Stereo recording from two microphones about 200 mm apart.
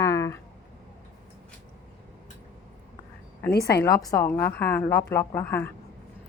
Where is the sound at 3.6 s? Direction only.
15° left (ahead or behind).